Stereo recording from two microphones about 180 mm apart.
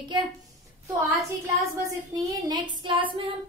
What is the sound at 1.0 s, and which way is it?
Speech, 15° right (ahead or behind).